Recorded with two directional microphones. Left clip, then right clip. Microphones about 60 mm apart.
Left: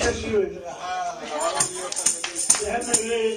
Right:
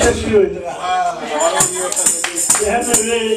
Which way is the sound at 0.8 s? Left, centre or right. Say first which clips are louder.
Right 11 dB; left.